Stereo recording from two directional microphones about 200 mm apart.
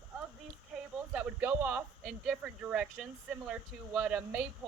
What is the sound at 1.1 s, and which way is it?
Speech, 10° right (ahead or behind).